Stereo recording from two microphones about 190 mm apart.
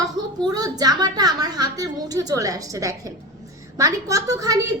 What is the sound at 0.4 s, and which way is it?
A woman's voice, 20° right (ahead or behind).